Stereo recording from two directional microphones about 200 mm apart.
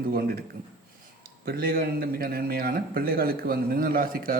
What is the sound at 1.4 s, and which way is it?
A man's voice, 50° right (ahead or behind).